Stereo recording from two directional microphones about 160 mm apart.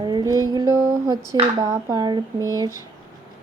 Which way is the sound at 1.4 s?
25° right (ahead or behind).